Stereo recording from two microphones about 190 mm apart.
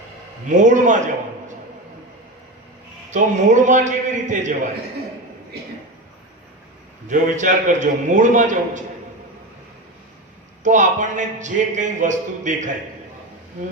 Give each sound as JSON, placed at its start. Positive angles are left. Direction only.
{"t": 0.4, "sound": "speech", "side_deg": -40}
{"t": 3.1, "sound": "speech", "side_deg": -40}
{"t": 7.1, "sound": "speech", "side_deg": -40}
{"t": 10.6, "sound": "speech", "side_deg": -40}